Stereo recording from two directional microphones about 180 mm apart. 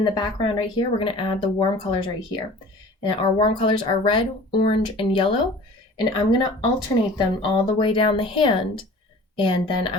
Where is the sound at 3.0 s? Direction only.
30° left (ahead or behind).